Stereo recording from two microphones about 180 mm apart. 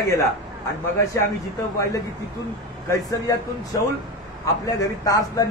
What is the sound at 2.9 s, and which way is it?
A man's voice, 20° left (ahead or behind).